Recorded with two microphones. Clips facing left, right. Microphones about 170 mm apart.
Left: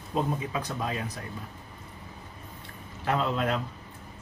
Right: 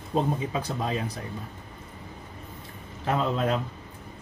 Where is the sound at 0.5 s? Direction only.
30° right (ahead or behind).